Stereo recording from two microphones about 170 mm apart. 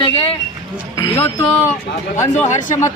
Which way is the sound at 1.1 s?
10° left (ahead or behind).